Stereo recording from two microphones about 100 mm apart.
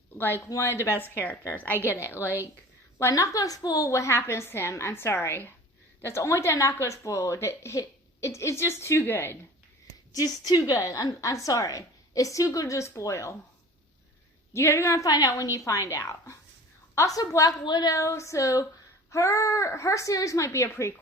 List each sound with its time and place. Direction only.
0.2 s speech: 25° left (ahead or behind)
10.1 s a woman's voice: 35° left (ahead or behind)
14.5 s a woman's voice: 30° left (ahead or behind)